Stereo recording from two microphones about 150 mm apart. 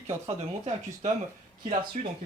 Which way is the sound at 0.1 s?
45° right (ahead or behind).